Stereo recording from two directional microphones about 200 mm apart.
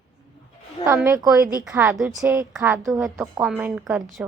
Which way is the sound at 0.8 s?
15° right (ahead or behind).